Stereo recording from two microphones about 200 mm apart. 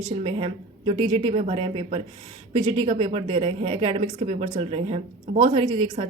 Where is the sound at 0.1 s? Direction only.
30° right (ahead or behind).